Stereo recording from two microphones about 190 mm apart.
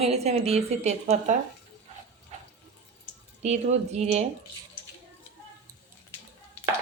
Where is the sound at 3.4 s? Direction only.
35° right (ahead or behind).